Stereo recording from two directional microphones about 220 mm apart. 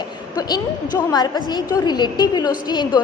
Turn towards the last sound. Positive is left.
turn(degrees=20)  # may be behind; listen again after turning